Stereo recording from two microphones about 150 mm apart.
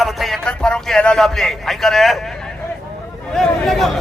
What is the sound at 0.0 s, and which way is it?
A man's voice, centre (ahead or behind).